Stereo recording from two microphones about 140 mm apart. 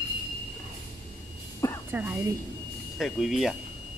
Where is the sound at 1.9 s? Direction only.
10° right (ahead or behind).